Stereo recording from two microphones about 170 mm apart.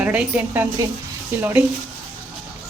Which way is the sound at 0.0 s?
10° right (ahead or behind).